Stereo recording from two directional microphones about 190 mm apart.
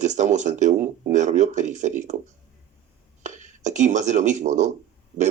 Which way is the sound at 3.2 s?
40° right (ahead or behind).